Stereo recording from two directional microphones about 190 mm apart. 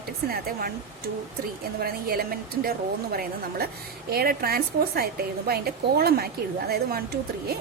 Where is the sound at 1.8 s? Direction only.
55° right (ahead or behind).